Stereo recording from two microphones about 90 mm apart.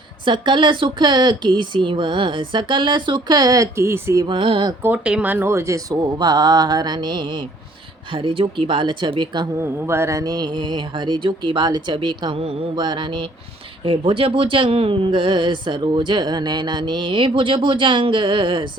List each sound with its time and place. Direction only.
0.3 s speech: 60° right (ahead or behind); by 4.2 s 30° right (ahead or behind)
4.3 s speech: 75° right (ahead or behind)
5.0 s speech: 15° right (ahead or behind)
5.5 s speech: 30° right (ahead or behind)
6.1 s mantra: 50° right (ahead or behind)
8.1 s speech: 80° right; by 9.5 s 60° right (ahead or behind)
9.6 s speech: 25° right (ahead or behind)
10.2 s a woman's voice: 50° right (ahead or behind); by 12.5 s 80° right
12.7 s speech: 55° right (ahead or behind)
13.8 s speech: 85° right; by 18.7 s 65° right (ahead or behind)